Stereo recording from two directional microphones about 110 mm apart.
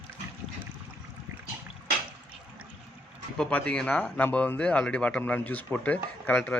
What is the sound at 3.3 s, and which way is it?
Speech, 10° left (ahead or behind).